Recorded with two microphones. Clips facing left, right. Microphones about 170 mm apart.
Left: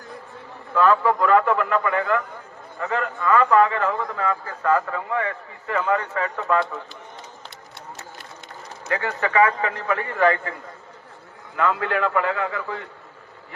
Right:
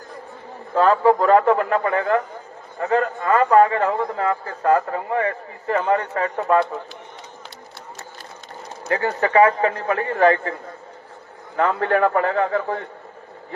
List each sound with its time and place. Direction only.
0.7 s a man's voice: 35° right (ahead or behind)
8.9 s a man's voice: 30° right (ahead or behind)
11.5 s a man's voice: 45° right (ahead or behind)